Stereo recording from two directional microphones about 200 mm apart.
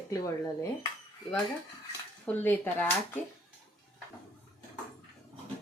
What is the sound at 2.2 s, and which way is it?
Speech, 10° left (ahead or behind).